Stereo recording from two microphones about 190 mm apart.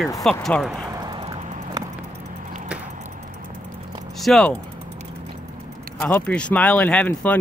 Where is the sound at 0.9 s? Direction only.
20° right (ahead or behind).